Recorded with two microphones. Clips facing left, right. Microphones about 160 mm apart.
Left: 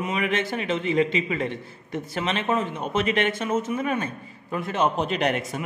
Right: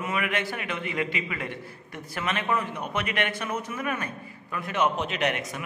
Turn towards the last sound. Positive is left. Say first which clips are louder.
# left 3 dB
turn(degrees=30)  # may be behind; listen again after turning